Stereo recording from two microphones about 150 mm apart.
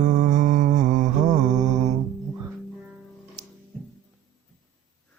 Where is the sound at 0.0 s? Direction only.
60° right (ahead or behind).